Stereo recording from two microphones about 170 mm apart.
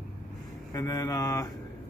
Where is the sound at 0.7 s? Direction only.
20° left (ahead or behind).